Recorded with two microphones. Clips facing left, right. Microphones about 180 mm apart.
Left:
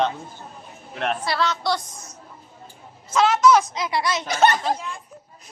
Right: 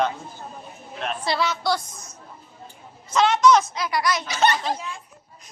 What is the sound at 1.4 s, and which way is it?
Speech, 5° right (ahead or behind).